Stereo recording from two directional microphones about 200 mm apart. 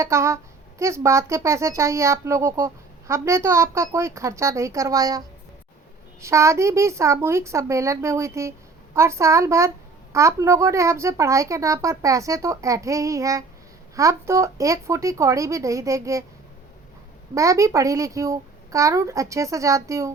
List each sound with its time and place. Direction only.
0.0 s speech: 15° right (ahead or behind)
6.2 s speech: 15° right (ahead or behind)
17.3 s speech: 15° right (ahead or behind)